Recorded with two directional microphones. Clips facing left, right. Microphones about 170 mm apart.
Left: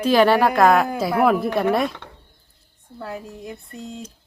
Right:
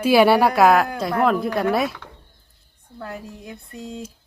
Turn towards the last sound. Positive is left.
turn(degrees=0)  # may be behind; listen again after turning